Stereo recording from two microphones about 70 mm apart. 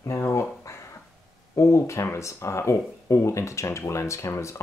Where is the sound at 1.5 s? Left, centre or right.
Left.